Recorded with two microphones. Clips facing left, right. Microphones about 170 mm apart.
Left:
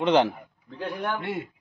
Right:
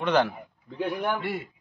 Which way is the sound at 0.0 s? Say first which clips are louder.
Left 3 dB; 20° left (ahead or behind).